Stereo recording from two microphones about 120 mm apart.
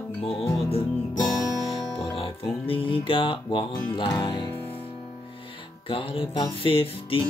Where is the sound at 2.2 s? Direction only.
50° left (ahead or behind).